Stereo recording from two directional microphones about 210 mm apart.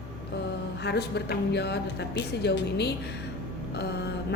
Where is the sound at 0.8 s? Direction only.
50° left (ahead or behind).